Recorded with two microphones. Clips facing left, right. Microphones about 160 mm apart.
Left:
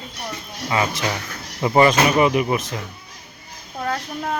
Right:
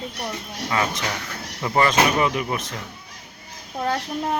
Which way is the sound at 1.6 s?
15° left (ahead or behind).